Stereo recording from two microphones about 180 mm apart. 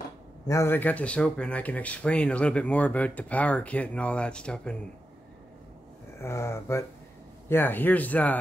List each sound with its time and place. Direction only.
0.5 s speech: 15° left (ahead or behind)
6.2 s speech: 15° left (ahead or behind)